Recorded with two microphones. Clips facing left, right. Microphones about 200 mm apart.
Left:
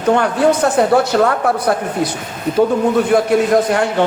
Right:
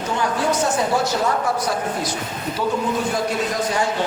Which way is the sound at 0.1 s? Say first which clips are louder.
Left 9 dB; 65° left (ahead or behind).